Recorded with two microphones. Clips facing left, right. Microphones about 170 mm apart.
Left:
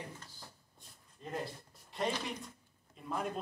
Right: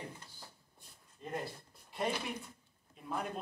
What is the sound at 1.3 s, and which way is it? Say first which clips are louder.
A man's voice: even; centre (ahead or behind).